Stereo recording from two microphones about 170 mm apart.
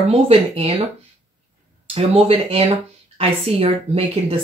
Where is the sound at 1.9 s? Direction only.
35° right (ahead or behind).